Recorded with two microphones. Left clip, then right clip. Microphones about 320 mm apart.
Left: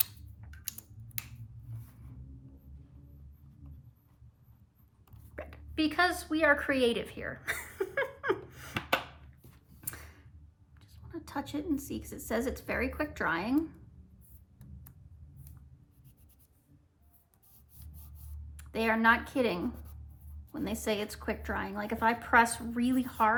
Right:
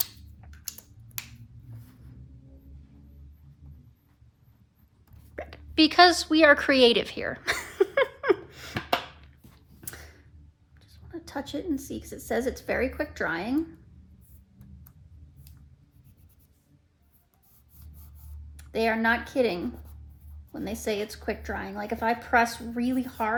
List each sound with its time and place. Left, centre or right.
0.0 s typing: centre
5.3 s a woman's voice: centre
8.5 s a sound: centre
11.3 s a woman's voice: centre
18.5 s a woman's voice: centre